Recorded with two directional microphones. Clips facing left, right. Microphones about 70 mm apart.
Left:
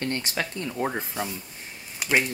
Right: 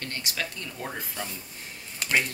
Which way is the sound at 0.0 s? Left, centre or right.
Left.